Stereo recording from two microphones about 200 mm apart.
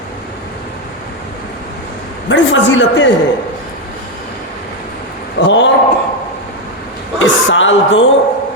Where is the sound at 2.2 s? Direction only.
70° left (ahead or behind).